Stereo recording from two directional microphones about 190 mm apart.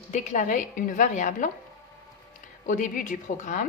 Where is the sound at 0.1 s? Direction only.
40° left (ahead or behind).